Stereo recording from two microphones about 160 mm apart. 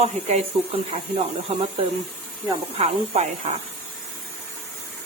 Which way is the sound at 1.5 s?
40° right (ahead or behind).